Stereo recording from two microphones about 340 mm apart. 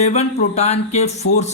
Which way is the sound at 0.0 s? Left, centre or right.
Centre.